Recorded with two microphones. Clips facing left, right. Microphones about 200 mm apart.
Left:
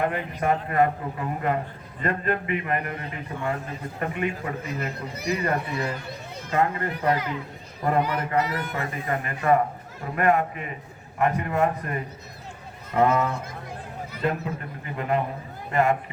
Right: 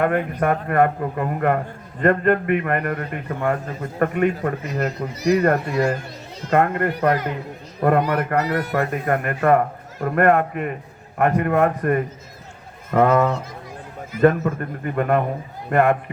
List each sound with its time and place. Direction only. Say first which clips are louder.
0.0 s a man's voice: right 6 dB; 50° right (ahead or behind)
6.1 s a sound: right 1 dB; 55° left (ahead or behind)
6.5 s a man's voice: right 6 dB; 60° right (ahead or behind)